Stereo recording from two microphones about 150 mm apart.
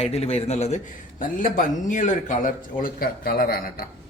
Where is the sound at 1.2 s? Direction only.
65° left (ahead or behind); by 3.6 s 85° left.